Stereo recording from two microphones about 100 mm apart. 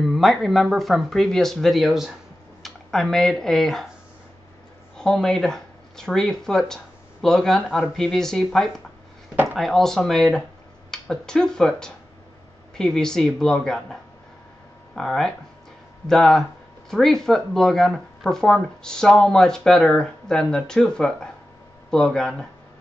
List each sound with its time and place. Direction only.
0.0 s speech: centre (ahead or behind)
4.9 s speech: 5° left (ahead or behind)
9.3 s a sound: 20° right (ahead or behind)
9.6 s speech: 5° left (ahead or behind)
15.0 s speech: 5° left (ahead or behind)